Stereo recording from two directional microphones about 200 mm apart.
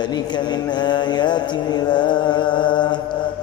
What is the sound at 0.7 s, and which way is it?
Mantra, 20° left (ahead or behind).